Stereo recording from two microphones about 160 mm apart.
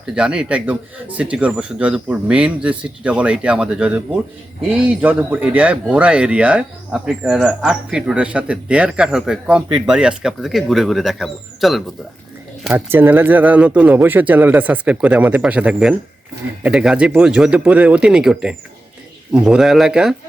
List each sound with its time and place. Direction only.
0.0 s speech: 5° right (ahead or behind)
12.7 s speech: 15° right (ahead or behind)